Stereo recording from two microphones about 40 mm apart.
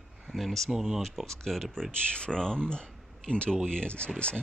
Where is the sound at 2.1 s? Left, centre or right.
Left.